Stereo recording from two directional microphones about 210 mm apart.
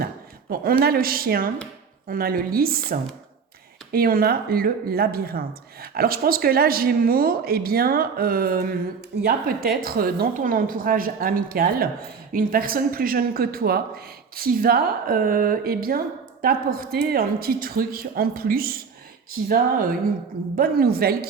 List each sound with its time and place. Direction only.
0.5 s speech: 45° right (ahead or behind)